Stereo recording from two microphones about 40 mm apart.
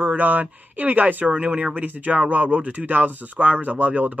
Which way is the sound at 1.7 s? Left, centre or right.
Right.